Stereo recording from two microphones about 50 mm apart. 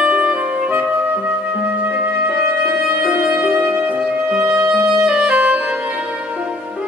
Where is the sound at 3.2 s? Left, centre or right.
Right.